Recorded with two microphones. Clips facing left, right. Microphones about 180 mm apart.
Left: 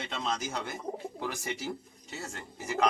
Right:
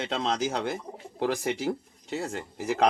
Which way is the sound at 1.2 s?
60° right (ahead or behind).